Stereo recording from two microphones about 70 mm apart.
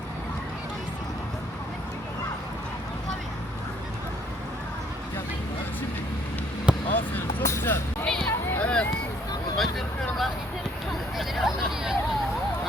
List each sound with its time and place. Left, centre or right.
6.9 s basketball bounce: left
7.4 s speech: left
8.0 s music: centre
8.5 s a sound: centre
9.6 s a sound: centre
11.2 s hubbub: centre